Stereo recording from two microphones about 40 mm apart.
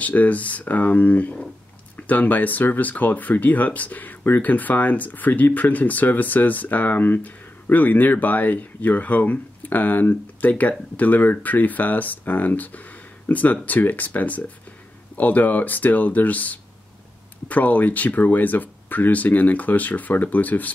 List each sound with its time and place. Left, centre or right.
0.0 s speech: left